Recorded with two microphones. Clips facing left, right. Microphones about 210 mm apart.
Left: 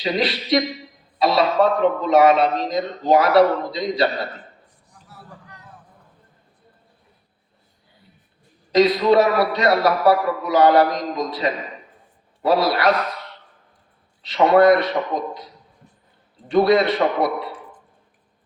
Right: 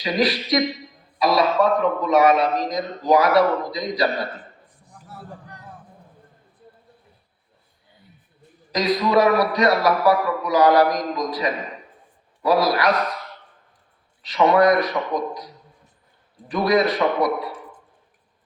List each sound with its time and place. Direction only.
0.0 s a man's voice: 25° left (ahead or behind)
4.9 s a sound: 50° right (ahead or behind)
8.7 s a man's voice: 25° left (ahead or behind)
14.2 s a man's voice: 30° left (ahead or behind)
16.5 s a man's voice: 25° left (ahead or behind)